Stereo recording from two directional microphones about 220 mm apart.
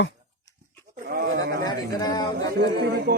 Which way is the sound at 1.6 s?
15° left (ahead or behind).